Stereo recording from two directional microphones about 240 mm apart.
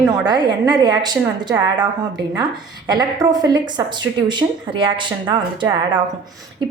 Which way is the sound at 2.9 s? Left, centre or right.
Centre.